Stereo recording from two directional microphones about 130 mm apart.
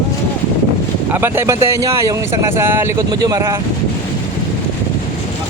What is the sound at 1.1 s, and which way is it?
Speech, 15° right (ahead or behind).